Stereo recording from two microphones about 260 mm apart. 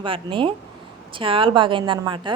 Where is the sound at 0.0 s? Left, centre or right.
Centre.